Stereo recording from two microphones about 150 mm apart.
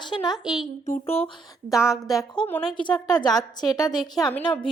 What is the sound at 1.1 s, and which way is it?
Speech, 40° left (ahead or behind).